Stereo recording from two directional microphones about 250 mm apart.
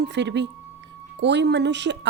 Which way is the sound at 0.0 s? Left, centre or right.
Right.